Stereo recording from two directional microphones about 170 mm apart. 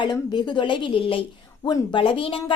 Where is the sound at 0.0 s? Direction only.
25° left (ahead or behind).